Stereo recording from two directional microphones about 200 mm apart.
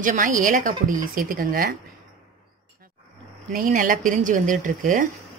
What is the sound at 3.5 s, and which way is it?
Speech, 45° right (ahead or behind).